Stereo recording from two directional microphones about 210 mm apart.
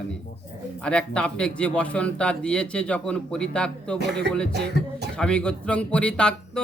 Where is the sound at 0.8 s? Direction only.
5° left (ahead or behind).